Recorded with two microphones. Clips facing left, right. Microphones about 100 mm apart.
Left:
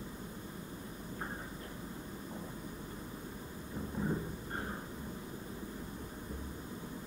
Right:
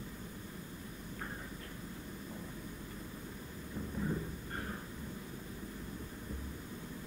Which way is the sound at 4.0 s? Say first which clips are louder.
Left 2 dB; 20° left (ahead or behind).